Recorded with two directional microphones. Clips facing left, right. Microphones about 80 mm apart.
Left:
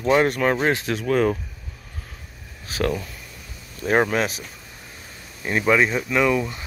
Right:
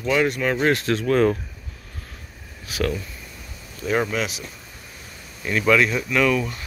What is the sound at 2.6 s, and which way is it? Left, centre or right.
Speech, left.